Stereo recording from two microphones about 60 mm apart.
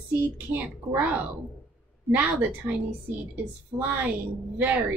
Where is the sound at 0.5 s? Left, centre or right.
Right.